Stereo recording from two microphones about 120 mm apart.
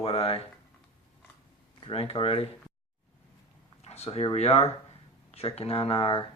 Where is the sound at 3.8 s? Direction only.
60° left (ahead or behind).